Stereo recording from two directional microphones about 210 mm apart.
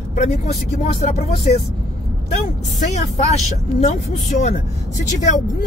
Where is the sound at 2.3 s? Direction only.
35° left (ahead or behind).